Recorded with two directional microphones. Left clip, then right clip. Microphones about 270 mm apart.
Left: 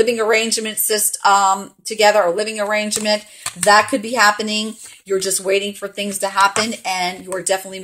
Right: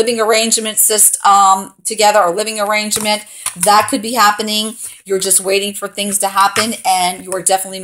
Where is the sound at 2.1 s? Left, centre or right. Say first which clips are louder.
Right 4 dB; centre.